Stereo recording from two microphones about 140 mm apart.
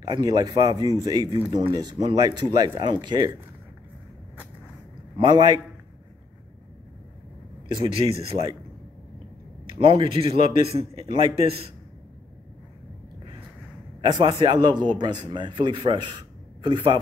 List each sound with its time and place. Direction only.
0.1 s speech: 30° right (ahead or behind)
5.1 s speech: 35° right (ahead or behind)
7.9 s speech: 40° right (ahead or behind)
9.7 s a man's voice: 40° right (ahead or behind)
14.0 s speech: 30° right (ahead or behind)